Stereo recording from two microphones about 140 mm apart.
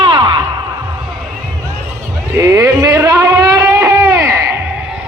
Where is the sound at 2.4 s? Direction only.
25° right (ahead or behind).